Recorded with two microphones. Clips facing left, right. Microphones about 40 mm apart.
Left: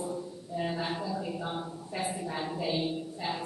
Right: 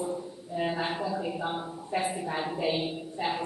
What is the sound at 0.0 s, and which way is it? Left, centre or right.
A man's voice, right.